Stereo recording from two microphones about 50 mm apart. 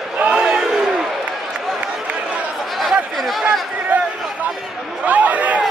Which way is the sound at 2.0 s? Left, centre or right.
Right.